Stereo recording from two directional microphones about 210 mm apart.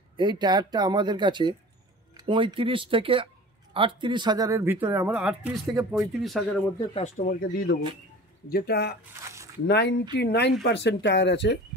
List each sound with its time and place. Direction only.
0.2 s speech: 20° right (ahead or behind); by 6.4 s centre (ahead or behind)
6.9 s speech: 30° left (ahead or behind)
7.2 s speech: 45° left (ahead or behind)
9.2 s a sound: 15° right (ahead or behind)
9.7 s speech: 55° left (ahead or behind)